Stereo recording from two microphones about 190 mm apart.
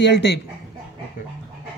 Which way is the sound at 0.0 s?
65° left (ahead or behind).